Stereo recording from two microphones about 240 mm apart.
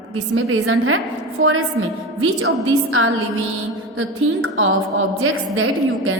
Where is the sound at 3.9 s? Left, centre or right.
Right.